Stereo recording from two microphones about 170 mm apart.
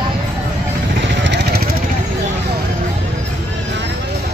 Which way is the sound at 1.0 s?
90° right.